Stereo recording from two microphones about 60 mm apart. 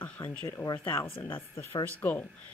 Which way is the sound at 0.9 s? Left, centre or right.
Left.